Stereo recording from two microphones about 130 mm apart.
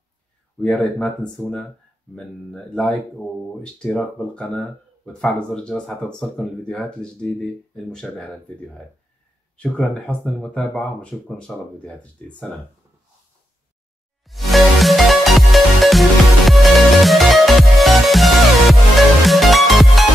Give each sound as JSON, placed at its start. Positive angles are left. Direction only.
{"t": 0.6, "sound": "speech", "side_deg": 5}
{"t": 9.6, "sound": "speech", "side_deg": 5}
{"t": 14.2, "sound": "music", "side_deg": 0}